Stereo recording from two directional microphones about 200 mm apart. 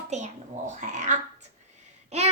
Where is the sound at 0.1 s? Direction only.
35° right (ahead or behind).